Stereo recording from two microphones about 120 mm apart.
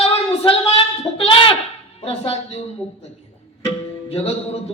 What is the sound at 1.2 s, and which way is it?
Goat, 50° left (ahead or behind).